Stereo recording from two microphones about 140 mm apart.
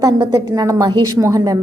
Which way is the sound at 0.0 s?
25° right (ahead or behind).